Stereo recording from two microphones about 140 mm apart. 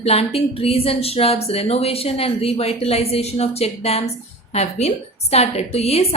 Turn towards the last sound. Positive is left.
turn(degrees=45)  # may be behind; listen again after turning